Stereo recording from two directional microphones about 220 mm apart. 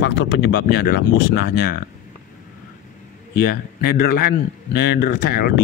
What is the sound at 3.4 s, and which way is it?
Speech, 40° left (ahead or behind).